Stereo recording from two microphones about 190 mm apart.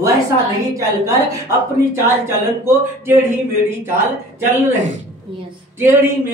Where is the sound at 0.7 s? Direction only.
15° right (ahead or behind).